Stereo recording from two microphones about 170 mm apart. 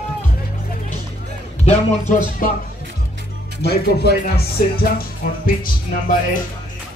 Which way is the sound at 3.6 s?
70° left (ahead or behind).